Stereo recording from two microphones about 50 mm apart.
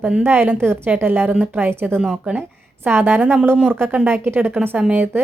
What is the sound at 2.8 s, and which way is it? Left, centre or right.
Speech, right.